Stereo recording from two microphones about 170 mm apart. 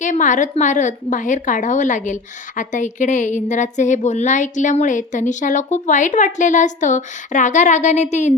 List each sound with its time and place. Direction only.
0.0 s a woman's voice: 50° left (ahead or behind)